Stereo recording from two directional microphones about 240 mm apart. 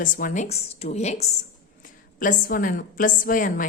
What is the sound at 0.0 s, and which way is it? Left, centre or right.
A woman's voice, left.